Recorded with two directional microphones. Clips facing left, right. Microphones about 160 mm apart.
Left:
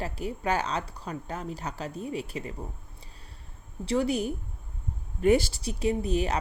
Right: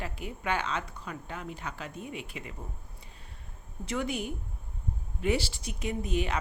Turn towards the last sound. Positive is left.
turn(degrees=35)  # may be behind; listen again after turning